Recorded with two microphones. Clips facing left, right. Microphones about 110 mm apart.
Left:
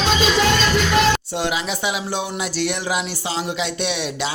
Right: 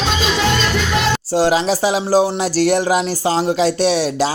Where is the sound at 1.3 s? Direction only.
35° right (ahead or behind).